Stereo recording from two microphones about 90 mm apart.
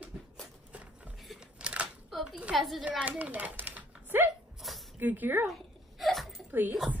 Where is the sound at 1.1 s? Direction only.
Centre (ahead or behind).